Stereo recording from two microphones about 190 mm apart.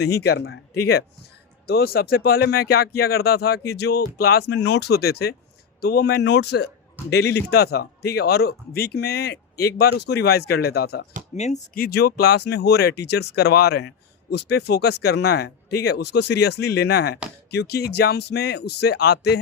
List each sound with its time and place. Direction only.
0.2 s speech: 60° left (ahead or behind)
1.6 s speech: 55° left (ahead or behind)
11.3 s speech: 35° left (ahead or behind); by 19.4 s 60° left (ahead or behind)